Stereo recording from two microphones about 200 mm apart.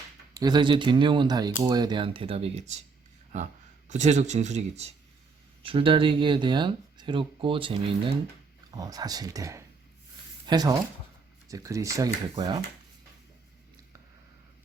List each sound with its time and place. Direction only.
0.3 s speech: 20° right (ahead or behind)
3.8 s speech: 35° right (ahead or behind); by 12.5 s 20° right (ahead or behind)